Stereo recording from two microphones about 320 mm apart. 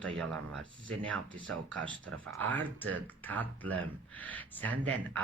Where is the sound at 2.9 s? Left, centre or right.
Centre.